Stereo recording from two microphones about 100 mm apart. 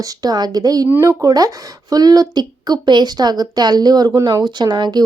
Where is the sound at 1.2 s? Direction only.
40° right (ahead or behind).